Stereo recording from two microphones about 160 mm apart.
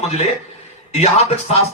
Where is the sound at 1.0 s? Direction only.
40° left (ahead or behind).